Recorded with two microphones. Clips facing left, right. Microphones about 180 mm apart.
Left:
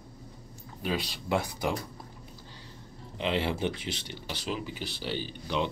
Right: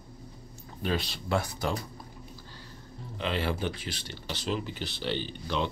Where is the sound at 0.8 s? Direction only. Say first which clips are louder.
Right 1 dB; 10° left (ahead or behind).